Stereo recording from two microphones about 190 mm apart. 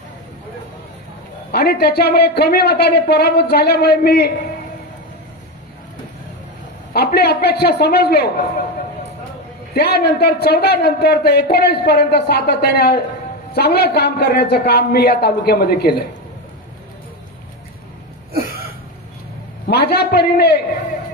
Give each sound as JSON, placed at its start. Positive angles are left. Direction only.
{"t": 1.5, "sound": "speech", "side_deg": 55}
{"t": 6.9, "sound": "speech", "side_deg": 55}
{"t": 9.8, "sound": "speech", "side_deg": 60}
{"t": 18.3, "sound": "a sound", "side_deg": -50}
{"t": 19.7, "sound": "speech", "side_deg": 60}